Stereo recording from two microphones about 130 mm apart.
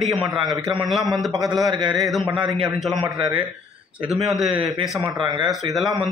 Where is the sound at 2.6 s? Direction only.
10° right (ahead or behind).